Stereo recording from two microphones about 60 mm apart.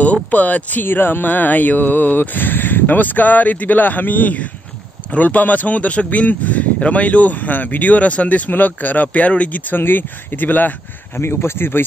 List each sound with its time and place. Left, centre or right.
0.0 s speech: left
11.1 s speech: left